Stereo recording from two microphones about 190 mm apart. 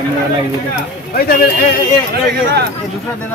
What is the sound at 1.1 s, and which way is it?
Speech, 50° left (ahead or behind).